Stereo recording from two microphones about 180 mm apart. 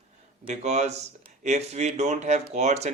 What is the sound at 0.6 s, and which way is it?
Speech, 40° right (ahead or behind).